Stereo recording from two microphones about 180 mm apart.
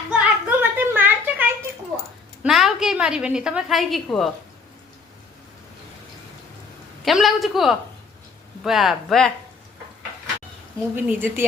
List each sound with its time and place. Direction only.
0.1 s a sound: 10° right (ahead or behind)
2.4 s a woman's voice: centre (ahead or behind)
7.0 s speech: centre (ahead or behind)
10.9 s speech: 10° right (ahead or behind)